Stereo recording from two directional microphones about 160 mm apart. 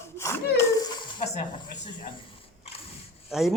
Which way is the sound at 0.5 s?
25° left (ahead or behind).